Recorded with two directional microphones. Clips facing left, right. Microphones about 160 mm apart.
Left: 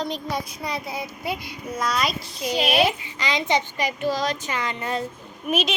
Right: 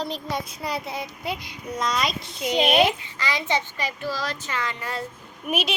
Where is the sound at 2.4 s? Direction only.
20° right (ahead or behind).